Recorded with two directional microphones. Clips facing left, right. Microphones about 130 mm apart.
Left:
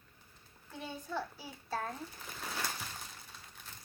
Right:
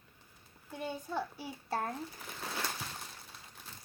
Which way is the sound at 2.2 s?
5° right (ahead or behind).